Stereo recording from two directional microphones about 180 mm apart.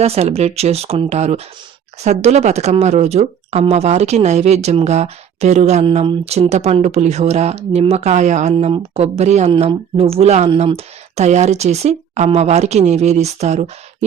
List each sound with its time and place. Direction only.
0.0 s speech: 35° right (ahead or behind)